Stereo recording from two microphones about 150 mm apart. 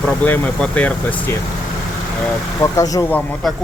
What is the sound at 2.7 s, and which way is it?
Speech, 25° left (ahead or behind).